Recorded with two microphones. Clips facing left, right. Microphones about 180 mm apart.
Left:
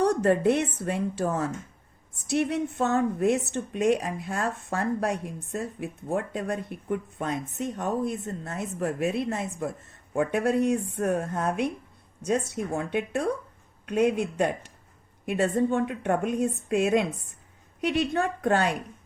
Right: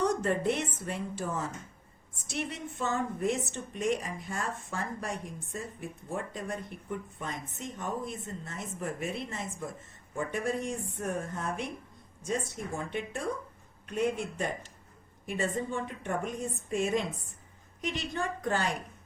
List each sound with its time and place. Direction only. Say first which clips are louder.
0.0 s a woman's voice: left 6 dB; 65° left (ahead or behind)